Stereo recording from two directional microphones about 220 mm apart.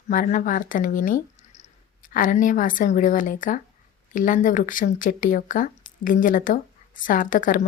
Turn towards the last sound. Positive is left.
turn(degrees=35)  # may be behind; listen again after turning